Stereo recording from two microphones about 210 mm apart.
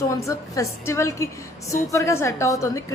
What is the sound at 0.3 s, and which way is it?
A woman's voice, 15° left (ahead or behind).